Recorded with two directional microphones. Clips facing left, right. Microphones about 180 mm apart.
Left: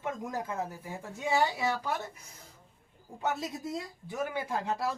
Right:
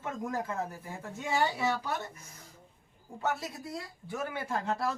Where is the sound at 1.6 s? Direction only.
10° left (ahead or behind).